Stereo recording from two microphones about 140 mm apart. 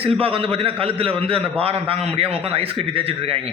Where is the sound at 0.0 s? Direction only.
40° right (ahead or behind).